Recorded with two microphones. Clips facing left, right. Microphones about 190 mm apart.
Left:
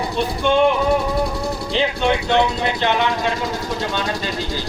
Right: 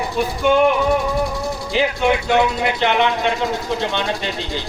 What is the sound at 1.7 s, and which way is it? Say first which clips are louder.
Speech: right 2 dB; 10° right (ahead or behind).